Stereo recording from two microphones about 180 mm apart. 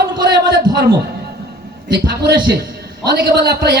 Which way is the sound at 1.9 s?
60° right (ahead or behind).